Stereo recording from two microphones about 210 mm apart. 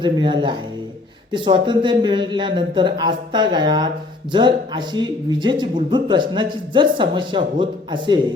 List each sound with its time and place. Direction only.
0.0 s speech: 20° right (ahead or behind)